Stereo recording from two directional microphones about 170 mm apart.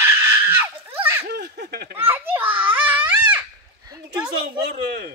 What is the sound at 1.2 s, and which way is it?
Laughter, 70° right (ahead or behind).